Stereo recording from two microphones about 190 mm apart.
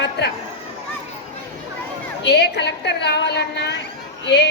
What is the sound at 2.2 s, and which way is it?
A woman's voice, 65° left (ahead or behind).